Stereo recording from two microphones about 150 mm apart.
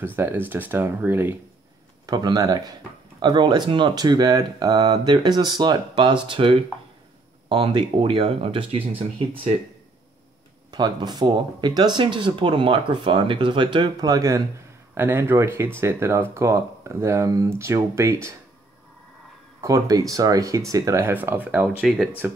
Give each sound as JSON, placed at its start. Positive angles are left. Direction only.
{"t": 0.0, "sound": "speech", "side_deg": -15}
{"t": 2.0, "sound": "speech", "side_deg": -25}
{"t": 10.7, "sound": "speech", "side_deg": -30}
{"t": 19.6, "sound": "speech", "side_deg": -20}
{"t": 21.8, "sound": "speech", "side_deg": 0}